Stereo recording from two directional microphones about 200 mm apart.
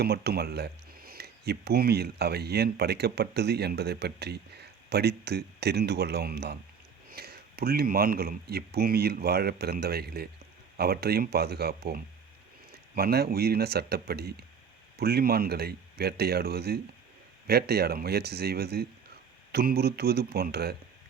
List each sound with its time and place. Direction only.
0.0 s speech: 55° right (ahead or behind)